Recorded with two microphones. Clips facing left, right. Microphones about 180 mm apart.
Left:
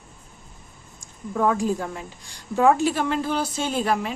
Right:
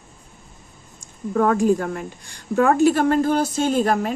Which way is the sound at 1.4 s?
55° right (ahead or behind).